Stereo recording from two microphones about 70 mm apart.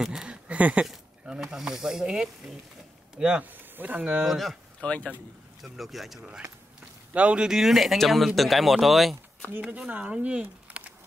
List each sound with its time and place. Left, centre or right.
0.0 s a sound: centre
1.2 s speech: centre
3.7 s speech: right
4.0 s speech: centre
4.3 s speech: centre
4.7 s speech: centre
5.6 s speech: centre
7.2 s speech: centre
9.6 s speech: centre